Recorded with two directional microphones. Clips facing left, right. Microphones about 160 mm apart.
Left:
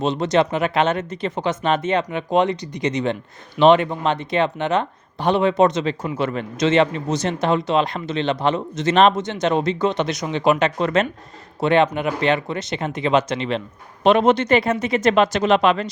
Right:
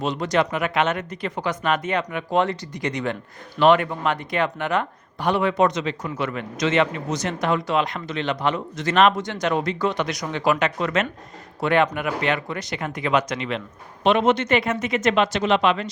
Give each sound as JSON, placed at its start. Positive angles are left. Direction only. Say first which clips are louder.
{"t": 0.0, "sound": "a man's voice", "louder": "left 4 dB", "side_deg": 25}